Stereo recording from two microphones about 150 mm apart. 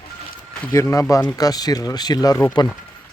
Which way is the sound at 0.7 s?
20° left (ahead or behind).